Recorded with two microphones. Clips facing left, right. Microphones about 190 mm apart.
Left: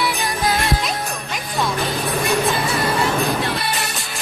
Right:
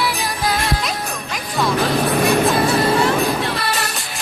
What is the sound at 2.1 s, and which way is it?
Music, 60° right (ahead or behind).